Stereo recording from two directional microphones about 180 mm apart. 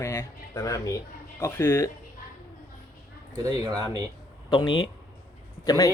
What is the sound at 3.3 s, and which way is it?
Speech, 20° right (ahead or behind).